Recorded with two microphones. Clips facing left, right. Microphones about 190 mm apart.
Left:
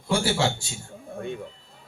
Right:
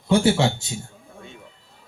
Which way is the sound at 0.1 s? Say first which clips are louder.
Right 6 dB; 20° right (ahead or behind).